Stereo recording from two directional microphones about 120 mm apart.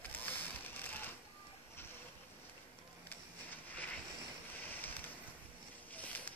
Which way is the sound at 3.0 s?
15° left (ahead or behind).